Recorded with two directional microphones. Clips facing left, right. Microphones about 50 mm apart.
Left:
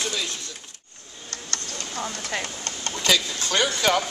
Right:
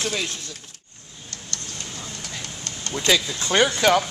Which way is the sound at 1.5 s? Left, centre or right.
Left.